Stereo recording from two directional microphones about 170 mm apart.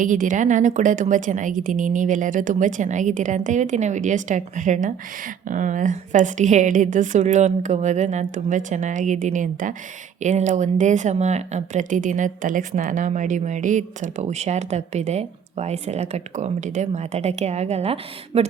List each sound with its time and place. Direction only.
0.0 s speech: 50° right (ahead or behind)